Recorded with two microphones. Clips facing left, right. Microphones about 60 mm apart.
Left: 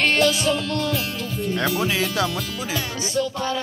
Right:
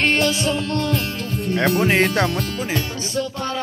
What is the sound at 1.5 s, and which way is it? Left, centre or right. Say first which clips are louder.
Speech: right 5 dB; right.